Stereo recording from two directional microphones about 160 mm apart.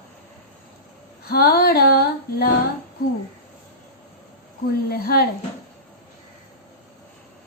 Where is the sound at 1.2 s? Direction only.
75° left (ahead or behind).